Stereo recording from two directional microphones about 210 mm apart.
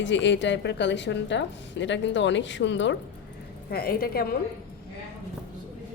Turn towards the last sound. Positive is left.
turn(degrees=45)  # may be behind; listen again after turning